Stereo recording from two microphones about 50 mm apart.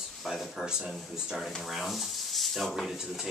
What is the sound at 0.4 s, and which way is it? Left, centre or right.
Speech, centre.